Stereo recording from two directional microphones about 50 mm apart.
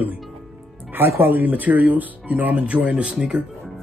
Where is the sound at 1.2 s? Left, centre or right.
Right; by 3.4 s centre.